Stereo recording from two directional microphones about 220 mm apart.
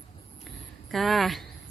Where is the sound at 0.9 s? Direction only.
Centre (ahead or behind).